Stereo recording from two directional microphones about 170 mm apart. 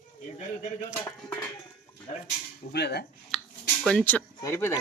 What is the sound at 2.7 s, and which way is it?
Speech, 75° left (ahead or behind).